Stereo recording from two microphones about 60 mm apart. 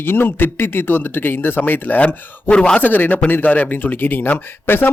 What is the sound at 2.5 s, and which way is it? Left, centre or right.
Speech, centre.